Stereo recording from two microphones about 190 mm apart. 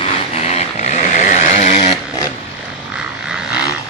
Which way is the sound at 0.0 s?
35° left (ahead or behind).